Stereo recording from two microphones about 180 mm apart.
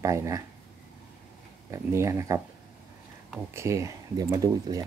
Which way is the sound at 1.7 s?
15° right (ahead or behind).